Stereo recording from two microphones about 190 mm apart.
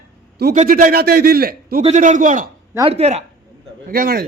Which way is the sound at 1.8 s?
35° right (ahead or behind).